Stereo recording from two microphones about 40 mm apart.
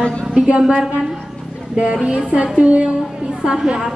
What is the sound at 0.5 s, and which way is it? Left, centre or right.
Speech, right.